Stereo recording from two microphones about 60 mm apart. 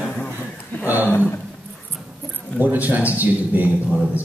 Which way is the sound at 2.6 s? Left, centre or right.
Right.